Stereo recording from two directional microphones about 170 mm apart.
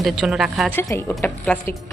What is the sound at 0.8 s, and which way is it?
Speech, 15° left (ahead or behind).